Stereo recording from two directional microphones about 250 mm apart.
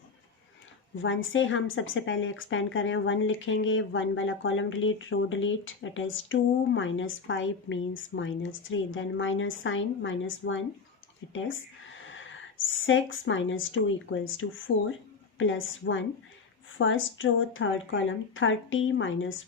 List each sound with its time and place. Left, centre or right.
1.0 s speech: left
11.3 s a sound: left
12.8 s speech: left